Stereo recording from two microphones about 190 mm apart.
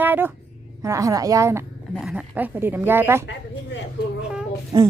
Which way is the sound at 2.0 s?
5° right (ahead or behind).